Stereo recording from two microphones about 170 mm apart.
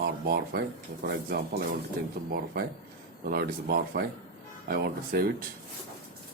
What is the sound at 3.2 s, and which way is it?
Speech, 60° right (ahead or behind).